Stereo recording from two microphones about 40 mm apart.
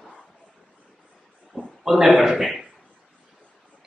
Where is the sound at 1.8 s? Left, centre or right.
Centre.